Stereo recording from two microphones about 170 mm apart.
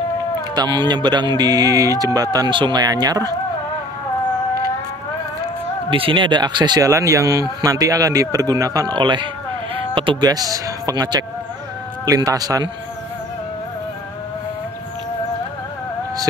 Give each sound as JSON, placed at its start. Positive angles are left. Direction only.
{"t": 0.6, "sound": "speech", "side_deg": -25}
{"t": 5.9, "sound": "speech", "side_deg": -30}